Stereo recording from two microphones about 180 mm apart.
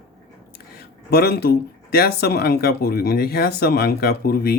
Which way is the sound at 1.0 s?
60° left (ahead or behind).